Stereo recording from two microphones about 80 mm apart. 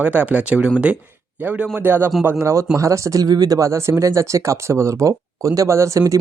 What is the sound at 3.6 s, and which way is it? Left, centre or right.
Speech, right.